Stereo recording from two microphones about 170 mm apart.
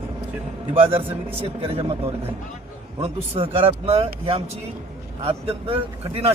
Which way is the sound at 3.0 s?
35° right (ahead or behind).